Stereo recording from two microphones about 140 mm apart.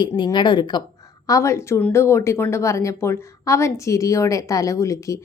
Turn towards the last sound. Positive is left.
turn(degrees=20)  # may be behind; listen again after turning